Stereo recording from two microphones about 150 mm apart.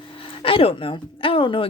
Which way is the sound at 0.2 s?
40° left (ahead or behind).